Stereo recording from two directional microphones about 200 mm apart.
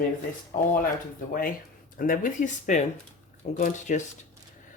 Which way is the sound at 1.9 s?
45° left (ahead or behind).